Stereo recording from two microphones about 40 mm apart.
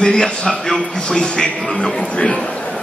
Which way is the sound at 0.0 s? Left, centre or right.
Centre.